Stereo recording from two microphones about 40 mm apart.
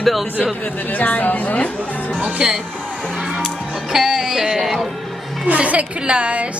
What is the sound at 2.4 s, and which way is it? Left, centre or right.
Speech, right.